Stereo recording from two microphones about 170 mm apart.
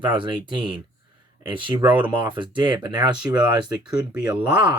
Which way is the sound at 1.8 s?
10° right (ahead or behind).